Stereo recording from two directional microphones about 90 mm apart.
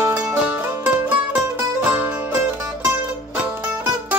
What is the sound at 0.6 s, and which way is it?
Music, 20° right (ahead or behind).